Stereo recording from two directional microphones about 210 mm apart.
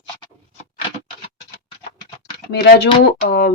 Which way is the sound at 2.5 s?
50° left (ahead or behind).